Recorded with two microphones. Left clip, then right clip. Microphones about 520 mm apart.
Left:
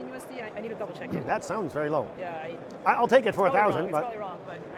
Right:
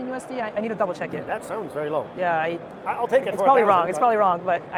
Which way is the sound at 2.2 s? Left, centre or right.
Right.